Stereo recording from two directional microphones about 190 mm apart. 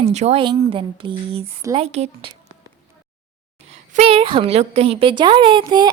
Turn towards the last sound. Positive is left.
turn(degrees=-25)  # may be behind; listen again after turning